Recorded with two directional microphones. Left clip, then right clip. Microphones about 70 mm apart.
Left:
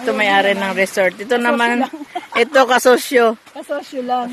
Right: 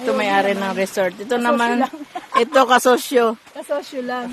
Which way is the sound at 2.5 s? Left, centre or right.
Centre.